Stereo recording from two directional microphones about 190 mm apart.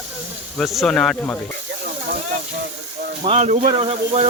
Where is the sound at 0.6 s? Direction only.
Centre (ahead or behind).